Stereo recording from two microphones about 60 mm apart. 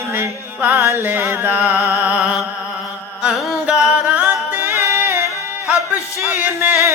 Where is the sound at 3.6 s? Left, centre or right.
Centre.